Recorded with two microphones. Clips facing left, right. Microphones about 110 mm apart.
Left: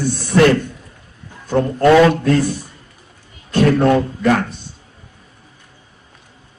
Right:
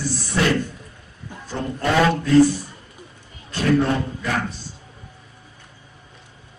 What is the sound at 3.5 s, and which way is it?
Speech, 65° left (ahead or behind).